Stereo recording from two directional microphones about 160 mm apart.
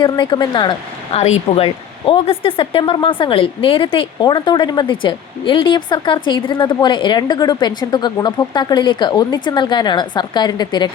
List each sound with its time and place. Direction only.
0.0 s a woman's voice: 25° left (ahead or behind)
1.1 s a woman's voice: 40° left (ahead or behind)